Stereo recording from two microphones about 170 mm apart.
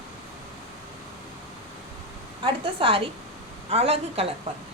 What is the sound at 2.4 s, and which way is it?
A woman's voice, 30° right (ahead or behind).